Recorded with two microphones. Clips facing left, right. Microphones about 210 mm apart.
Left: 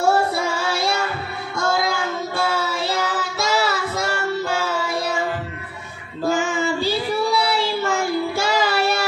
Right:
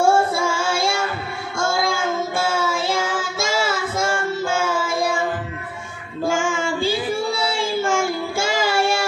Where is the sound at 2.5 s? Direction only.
50° right (ahead or behind).